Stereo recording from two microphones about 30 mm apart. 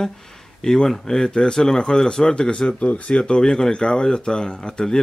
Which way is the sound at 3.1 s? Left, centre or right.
Left.